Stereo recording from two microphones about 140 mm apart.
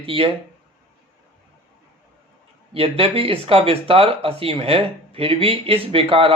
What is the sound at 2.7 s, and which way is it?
Speech, 45° right (ahead or behind).